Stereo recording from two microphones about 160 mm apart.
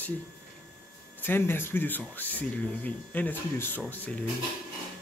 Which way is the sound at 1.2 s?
15° left (ahead or behind).